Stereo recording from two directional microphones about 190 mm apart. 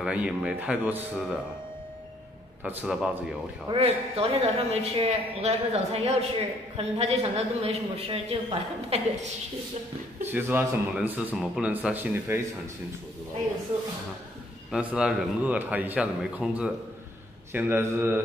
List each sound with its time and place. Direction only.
0.0 s a man's voice: 5° right (ahead or behind)
2.8 s a man's voice: centre (ahead or behind)
3.6 s speech: 30° right (ahead or behind)
10.2 s speech: 10° right (ahead or behind)
14.7 s speech: 5° right (ahead or behind)